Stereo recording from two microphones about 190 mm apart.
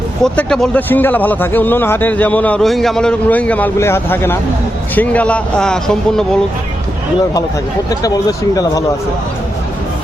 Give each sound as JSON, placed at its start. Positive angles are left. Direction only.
{"t": 0.2, "sound": "a man's voice", "side_deg": 5}
{"t": 7.9, "sound": "speech", "side_deg": 20}